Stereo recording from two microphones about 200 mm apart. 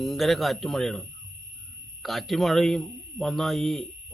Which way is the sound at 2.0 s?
Centre (ahead or behind).